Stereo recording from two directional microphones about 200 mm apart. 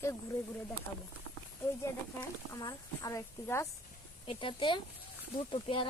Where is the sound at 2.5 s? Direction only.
20° left (ahead or behind).